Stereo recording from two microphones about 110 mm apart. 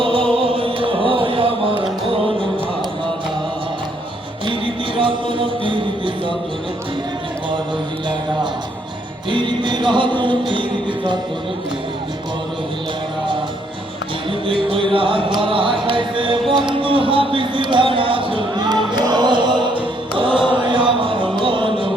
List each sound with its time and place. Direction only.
0.0 s music: 55° right (ahead or behind)
4.4 s music: 50° right (ahead or behind)
9.3 s music: 45° right (ahead or behind)
14.4 s music: 50° right (ahead or behind)
21.0 s a sound: 50° right (ahead or behind)